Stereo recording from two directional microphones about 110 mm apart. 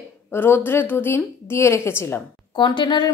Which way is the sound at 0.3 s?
20° left (ahead or behind).